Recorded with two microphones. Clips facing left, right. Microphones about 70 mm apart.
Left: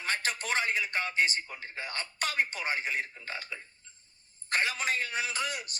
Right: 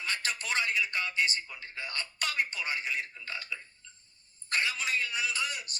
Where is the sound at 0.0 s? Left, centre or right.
Left.